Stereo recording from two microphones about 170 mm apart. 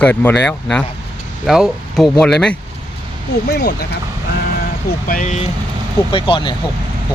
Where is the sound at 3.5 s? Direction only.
75° left (ahead or behind).